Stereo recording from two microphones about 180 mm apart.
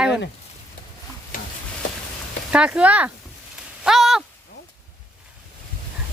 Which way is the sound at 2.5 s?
5° right (ahead or behind).